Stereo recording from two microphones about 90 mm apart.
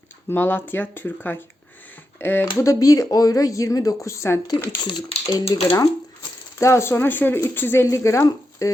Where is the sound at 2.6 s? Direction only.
40° left (ahead or behind).